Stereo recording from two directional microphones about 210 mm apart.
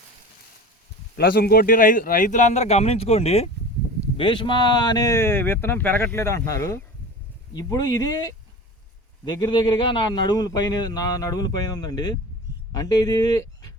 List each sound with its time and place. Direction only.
1.1 s a man's voice: 45° left (ahead or behind); by 13.7 s 20° left (ahead or behind)